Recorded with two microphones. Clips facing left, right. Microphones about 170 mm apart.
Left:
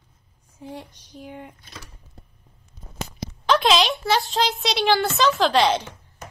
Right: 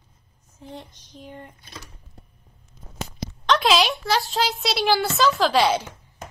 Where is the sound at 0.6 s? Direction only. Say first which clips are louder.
Left 2 dB; 10° left (ahead or behind).